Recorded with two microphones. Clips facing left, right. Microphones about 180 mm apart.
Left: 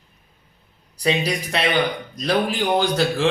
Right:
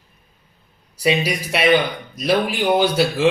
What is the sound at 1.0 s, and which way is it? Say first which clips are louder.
Speech: right 2 dB; 10° right (ahead or behind).